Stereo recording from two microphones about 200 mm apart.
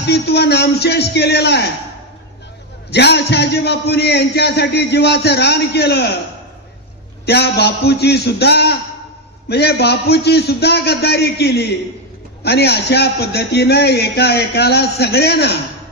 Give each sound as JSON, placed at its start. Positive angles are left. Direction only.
{"t": 0.0, "sound": "a man's voice", "side_deg": 55}
{"t": 2.9, "sound": "a man's voice", "side_deg": 55}
{"t": 7.2, "sound": "a man's voice", "side_deg": 55}